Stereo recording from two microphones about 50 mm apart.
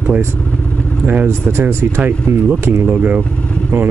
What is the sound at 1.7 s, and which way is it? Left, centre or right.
Speech, right.